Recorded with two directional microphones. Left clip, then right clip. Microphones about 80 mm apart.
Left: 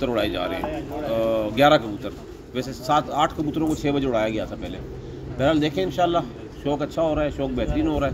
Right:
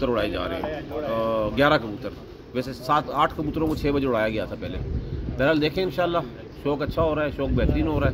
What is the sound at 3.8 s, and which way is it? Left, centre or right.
A man's voice, right.